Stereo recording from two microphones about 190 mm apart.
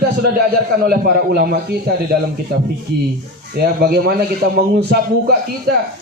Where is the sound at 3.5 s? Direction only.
55° right (ahead or behind).